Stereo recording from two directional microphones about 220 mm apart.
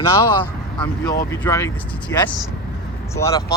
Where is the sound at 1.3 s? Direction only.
15° left (ahead or behind).